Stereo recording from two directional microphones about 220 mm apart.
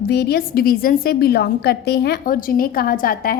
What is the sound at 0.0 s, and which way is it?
A woman's voice, 45° left (ahead or behind).